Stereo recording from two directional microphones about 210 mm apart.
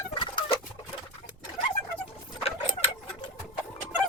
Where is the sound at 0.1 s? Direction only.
25° left (ahead or behind).